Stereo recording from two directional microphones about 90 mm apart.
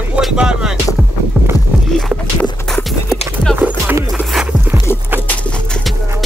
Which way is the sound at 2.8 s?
Centre (ahead or behind).